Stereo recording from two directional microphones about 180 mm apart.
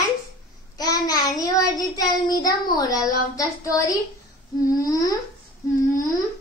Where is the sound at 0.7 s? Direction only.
20° left (ahead or behind).